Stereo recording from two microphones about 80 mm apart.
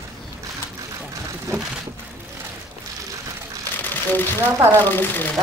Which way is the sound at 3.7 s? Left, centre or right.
Left.